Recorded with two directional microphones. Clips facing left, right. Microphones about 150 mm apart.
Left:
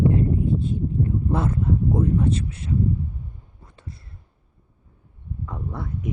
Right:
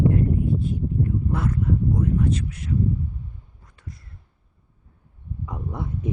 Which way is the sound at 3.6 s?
25° left (ahead or behind).